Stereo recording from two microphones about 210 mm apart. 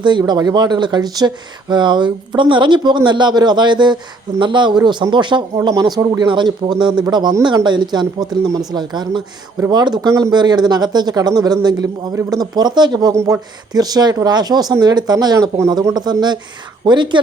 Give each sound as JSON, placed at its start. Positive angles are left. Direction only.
{"t": 0.0, "sound": "speech", "side_deg": -20}